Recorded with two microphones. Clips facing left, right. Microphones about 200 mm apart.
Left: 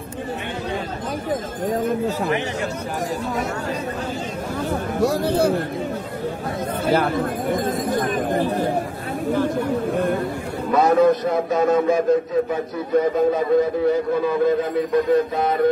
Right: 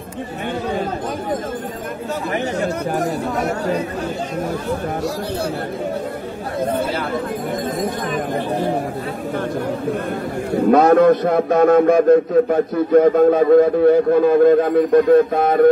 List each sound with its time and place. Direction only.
6.9 s speech: 55° left (ahead or behind)
10.5 s a man's voice: 60° right (ahead or behind)